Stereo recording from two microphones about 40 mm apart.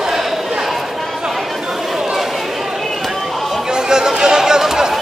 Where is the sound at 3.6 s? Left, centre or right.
Centre.